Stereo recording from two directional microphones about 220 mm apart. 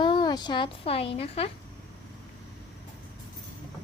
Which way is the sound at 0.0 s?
20° left (ahead or behind).